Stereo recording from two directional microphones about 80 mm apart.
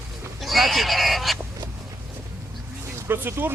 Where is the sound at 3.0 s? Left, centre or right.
Right.